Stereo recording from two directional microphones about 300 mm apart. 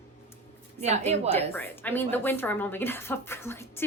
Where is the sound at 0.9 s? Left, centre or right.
Right.